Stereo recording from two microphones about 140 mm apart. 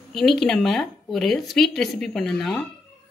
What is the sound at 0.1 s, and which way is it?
Speech, centre (ahead or behind).